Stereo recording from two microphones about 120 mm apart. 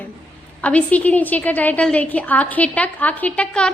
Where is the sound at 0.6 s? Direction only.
10° left (ahead or behind).